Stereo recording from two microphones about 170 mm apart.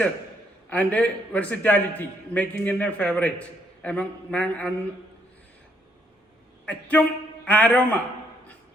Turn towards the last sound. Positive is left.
turn(degrees=10)  # may be behind; listen again after turning